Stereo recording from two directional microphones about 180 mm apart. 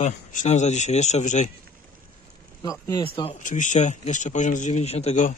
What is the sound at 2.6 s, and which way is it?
Speech, 20° left (ahead or behind).